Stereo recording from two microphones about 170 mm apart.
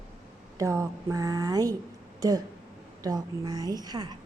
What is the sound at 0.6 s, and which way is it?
A woman's voice, 20° right (ahead or behind).